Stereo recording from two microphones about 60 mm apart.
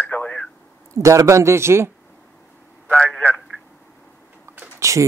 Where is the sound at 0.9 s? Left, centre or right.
Right.